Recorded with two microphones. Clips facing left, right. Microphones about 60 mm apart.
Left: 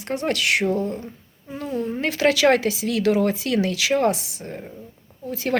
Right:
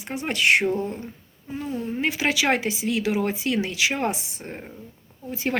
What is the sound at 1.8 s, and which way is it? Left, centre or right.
Speech, centre.